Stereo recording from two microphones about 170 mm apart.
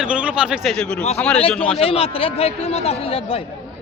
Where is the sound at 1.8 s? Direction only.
35° left (ahead or behind).